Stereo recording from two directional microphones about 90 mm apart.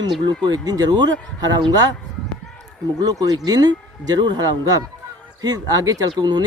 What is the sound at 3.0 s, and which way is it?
Speech, 40° right (ahead or behind).